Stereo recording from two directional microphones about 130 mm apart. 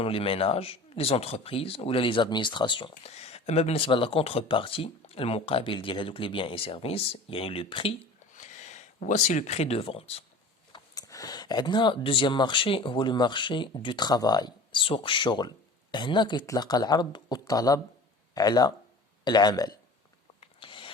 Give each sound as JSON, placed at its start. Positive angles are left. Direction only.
{"t": 0.0, "sound": "speech", "side_deg": 45}
{"t": 8.4, "sound": "speech", "side_deg": 65}
{"t": 10.7, "sound": "speech", "side_deg": 25}
{"t": 20.4, "sound": "a sound", "side_deg": 40}